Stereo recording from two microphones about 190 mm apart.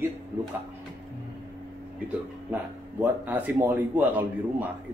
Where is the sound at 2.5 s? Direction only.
10° right (ahead or behind).